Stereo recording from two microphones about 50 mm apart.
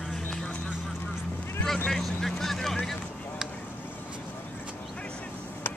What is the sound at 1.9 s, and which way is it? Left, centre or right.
Vehicle, centre.